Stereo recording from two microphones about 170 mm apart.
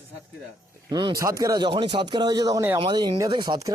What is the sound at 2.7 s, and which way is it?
Speech, 30° right (ahead or behind).